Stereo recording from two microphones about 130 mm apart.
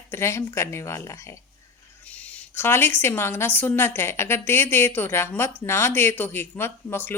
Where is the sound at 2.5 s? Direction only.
20° left (ahead or behind).